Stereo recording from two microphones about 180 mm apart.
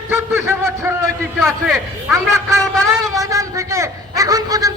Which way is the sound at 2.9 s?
15° right (ahead or behind).